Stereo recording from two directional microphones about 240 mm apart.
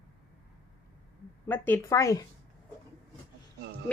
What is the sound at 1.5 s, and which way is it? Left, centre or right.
Speech, centre.